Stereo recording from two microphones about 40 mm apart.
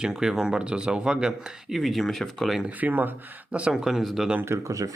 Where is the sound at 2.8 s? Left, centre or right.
Right.